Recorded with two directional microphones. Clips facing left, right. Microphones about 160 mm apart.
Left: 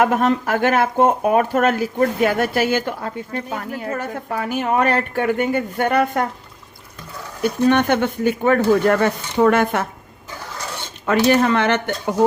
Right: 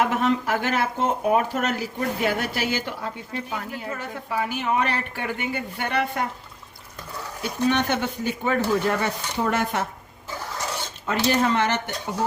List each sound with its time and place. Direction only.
0.0 s speech: 50° left (ahead or behind)
7.7 s speech: 55° left (ahead or behind)
11.0 s speech: 65° left (ahead or behind)